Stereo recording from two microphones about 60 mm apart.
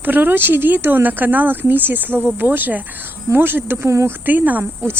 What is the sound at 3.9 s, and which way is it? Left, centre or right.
Speech, right.